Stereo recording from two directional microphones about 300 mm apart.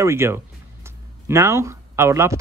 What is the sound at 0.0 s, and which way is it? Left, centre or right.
Speech, centre.